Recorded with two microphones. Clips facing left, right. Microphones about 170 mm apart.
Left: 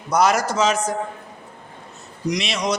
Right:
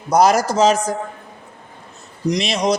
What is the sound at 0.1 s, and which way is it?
Speech, 35° right (ahead or behind).